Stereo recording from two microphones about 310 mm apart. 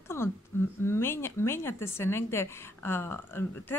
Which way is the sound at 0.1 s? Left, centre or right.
Centre.